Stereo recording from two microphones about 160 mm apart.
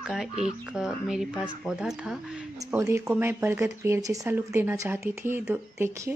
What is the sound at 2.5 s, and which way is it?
Speech, 20° right (ahead or behind).